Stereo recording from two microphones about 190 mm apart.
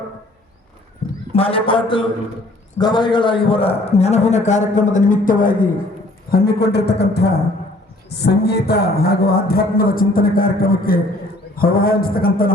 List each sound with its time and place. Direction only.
1.4 s a man's voice: 30° left (ahead or behind); by 5.6 s 45° left (ahead or behind)
6.3 s a man's voice: 55° left (ahead or behind)